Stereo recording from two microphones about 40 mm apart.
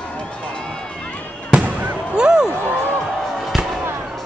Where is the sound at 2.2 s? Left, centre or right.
Centre.